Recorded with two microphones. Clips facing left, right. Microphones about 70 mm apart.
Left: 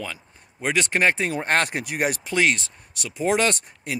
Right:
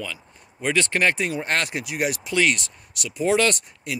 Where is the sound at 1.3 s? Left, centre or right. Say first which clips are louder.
Left 2 dB; left.